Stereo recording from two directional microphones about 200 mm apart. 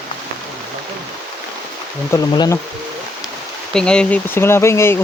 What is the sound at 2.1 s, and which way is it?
Speech, 20° left (ahead or behind).